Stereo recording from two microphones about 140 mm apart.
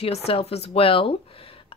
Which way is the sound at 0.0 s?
45° left (ahead or behind).